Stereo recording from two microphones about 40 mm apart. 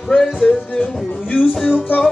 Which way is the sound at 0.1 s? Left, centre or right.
Centre.